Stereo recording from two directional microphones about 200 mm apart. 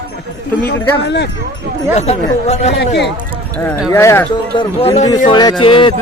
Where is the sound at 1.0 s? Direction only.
60° left (ahead or behind).